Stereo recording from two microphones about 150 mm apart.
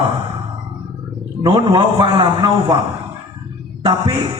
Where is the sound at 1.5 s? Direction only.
35° right (ahead or behind).